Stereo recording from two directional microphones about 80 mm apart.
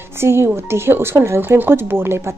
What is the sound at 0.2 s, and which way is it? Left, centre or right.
Speech, right.